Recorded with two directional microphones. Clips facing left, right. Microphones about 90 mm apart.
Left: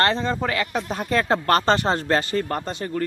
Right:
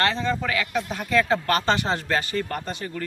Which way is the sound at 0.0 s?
35° left (ahead or behind).